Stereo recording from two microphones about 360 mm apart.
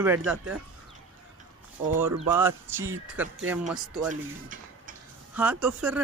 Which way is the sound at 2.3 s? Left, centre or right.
Centre.